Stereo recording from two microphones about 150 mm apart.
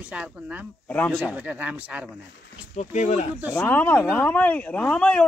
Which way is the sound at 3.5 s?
10° left (ahead or behind).